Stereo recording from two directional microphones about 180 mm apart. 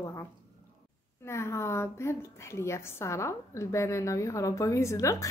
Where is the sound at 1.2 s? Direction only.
15° left (ahead or behind).